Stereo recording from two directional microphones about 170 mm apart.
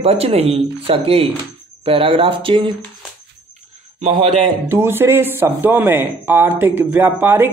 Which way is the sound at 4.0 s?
40° right (ahead or behind).